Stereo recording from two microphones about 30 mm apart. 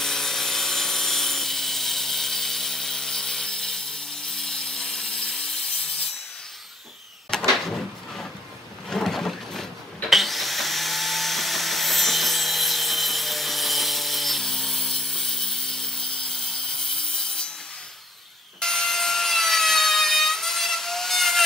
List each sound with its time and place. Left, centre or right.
0.0 s wood: centre
7.3 s door: centre
8.9 s a sound: centre
10.0 s wood: centre
14.4 s sawing: centre
18.6 s wood: centre